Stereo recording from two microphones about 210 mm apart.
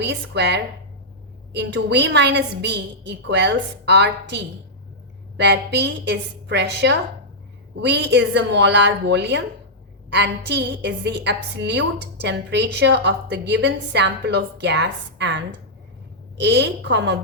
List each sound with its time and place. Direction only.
0.0 s a woman's voice: 55° right (ahead or behind)